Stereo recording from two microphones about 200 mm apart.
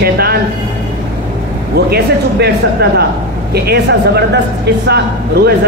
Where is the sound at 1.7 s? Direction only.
50° right (ahead or behind).